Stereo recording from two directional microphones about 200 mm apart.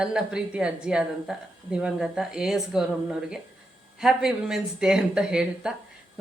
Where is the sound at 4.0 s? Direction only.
5° right (ahead or behind).